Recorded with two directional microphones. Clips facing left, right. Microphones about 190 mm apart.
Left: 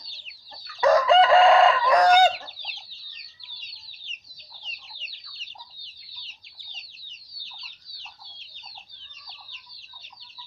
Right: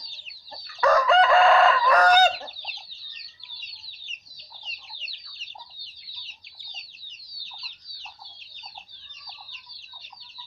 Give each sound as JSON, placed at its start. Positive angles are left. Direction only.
{"t": 0.8, "sound": "chicken", "side_deg": 20}